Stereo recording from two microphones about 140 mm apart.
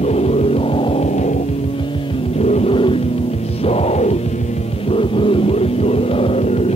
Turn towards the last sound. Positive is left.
turn(degrees=50)  # may be behind; listen again after turning